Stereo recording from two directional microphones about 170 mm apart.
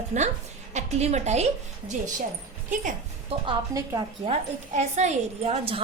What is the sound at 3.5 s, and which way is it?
Speech, 20° right (ahead or behind).